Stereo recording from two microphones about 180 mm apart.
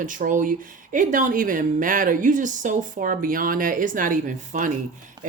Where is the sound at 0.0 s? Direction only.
45° right (ahead or behind).